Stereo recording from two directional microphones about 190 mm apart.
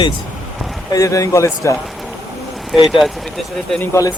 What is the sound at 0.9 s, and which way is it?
Speech, 15° left (ahead or behind).